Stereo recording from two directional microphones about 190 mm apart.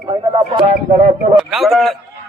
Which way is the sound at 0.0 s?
25° right (ahead or behind).